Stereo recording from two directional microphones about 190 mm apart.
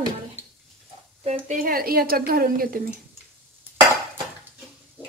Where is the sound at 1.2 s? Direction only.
35° right (ahead or behind).